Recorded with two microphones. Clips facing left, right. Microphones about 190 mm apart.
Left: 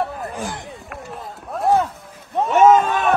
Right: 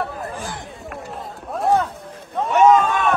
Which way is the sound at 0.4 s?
20° left (ahead or behind).